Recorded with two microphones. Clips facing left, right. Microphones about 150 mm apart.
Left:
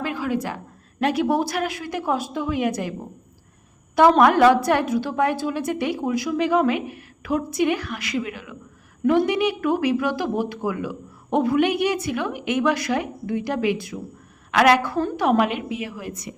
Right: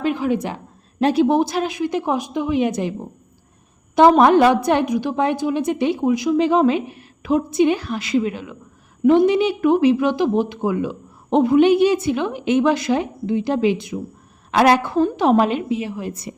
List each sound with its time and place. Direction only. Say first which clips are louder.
0.0 s a woman's voice: right 5 dB; 20° right (ahead or behind)
4.2 s a woman's voice: right 2 dB; 25° right (ahead or behind)